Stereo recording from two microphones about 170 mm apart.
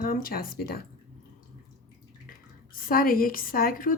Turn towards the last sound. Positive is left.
turn(degrees=55)  # may be behind; listen again after turning